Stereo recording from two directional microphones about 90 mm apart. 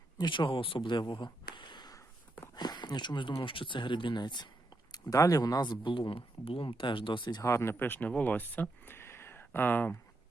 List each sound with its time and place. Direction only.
0.2 s speech: 65° left (ahead or behind)
4.9 s speech: 45° left (ahead or behind)
7.4 s speech: 30° left (ahead or behind)
8.9 s a sound: 25° left (ahead or behind)